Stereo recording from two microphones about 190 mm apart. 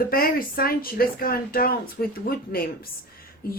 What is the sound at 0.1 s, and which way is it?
Speech, 50° left (ahead or behind).